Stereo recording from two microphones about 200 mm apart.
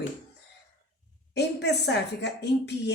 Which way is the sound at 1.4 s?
60° left (ahead or behind).